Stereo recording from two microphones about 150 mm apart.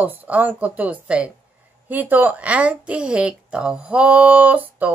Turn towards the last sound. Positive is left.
turn(degrees=-10)  # may be behind; listen again after turning